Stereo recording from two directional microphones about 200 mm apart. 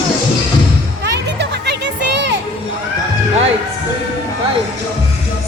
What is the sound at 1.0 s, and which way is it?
Music, 60° right (ahead or behind).